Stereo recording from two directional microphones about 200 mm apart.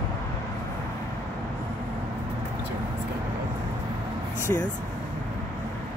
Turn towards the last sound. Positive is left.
turn(degrees=20)  # may be behind; listen again after turning